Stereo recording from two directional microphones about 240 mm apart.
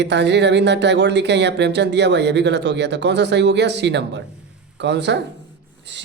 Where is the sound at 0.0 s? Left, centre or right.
Right.